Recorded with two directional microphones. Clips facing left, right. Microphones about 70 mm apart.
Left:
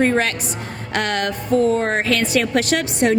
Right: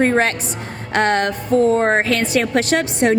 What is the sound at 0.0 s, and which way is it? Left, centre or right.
A woman's voice, right.